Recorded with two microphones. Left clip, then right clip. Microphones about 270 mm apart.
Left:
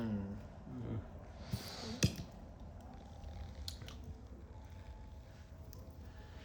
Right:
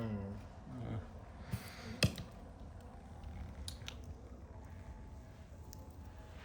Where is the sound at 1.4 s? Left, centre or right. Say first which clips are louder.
Left 4 dB; centre.